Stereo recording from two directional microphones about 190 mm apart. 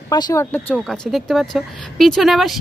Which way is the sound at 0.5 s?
5° left (ahead or behind).